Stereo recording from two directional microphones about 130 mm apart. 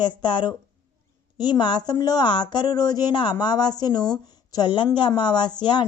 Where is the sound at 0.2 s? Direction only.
35° left (ahead or behind).